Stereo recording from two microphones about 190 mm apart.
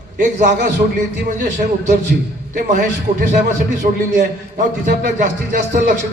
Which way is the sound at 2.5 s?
45° right (ahead or behind).